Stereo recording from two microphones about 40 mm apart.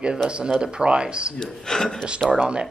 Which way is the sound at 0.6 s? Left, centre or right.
Right.